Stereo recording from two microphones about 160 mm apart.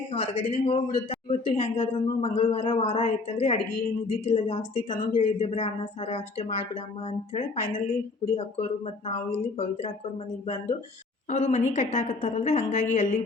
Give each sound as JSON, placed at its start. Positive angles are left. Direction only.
{"t": 0.1, "sound": "a man's voice", "side_deg": 35}
{"t": 11.3, "sound": "a woman's voice", "side_deg": 45}